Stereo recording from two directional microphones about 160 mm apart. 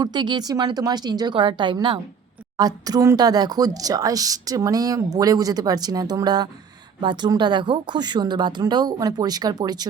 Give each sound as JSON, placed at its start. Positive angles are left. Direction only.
{"t": 0.0, "sound": "speech", "side_deg": -30}